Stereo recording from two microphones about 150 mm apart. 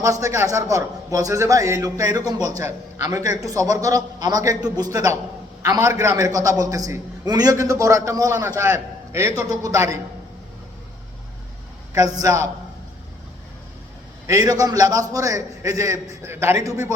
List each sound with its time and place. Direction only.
0.0 s a man's voice: 20° right (ahead or behind)
12.2 s a man's voice: 20° right (ahead or behind)
14.3 s a man's voice: 25° right (ahead or behind)